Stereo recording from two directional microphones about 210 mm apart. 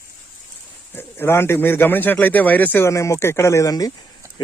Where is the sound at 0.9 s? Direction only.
10° left (ahead or behind).